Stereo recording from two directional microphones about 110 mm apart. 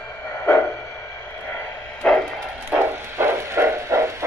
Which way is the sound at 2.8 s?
20° right (ahead or behind).